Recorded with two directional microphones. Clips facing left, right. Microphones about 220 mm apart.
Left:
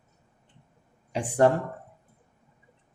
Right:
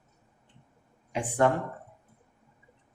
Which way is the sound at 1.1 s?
35° left (ahead or behind).